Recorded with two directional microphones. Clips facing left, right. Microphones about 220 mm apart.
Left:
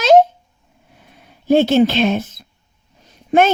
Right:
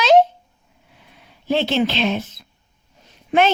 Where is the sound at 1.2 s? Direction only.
50° left (ahead or behind).